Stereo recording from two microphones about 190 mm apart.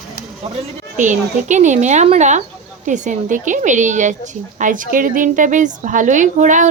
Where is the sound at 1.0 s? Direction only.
40° right (ahead or behind).